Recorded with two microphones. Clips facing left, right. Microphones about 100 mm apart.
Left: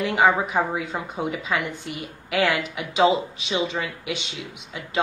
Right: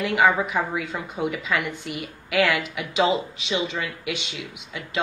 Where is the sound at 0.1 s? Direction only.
30° left (ahead or behind).